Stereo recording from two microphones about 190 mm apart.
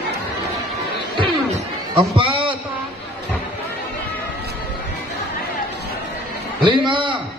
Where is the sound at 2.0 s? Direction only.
25° right (ahead or behind).